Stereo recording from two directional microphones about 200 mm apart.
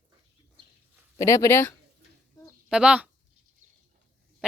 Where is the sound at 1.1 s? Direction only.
15° left (ahead or behind).